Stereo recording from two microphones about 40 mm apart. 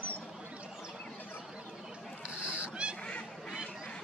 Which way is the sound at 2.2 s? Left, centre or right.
Right.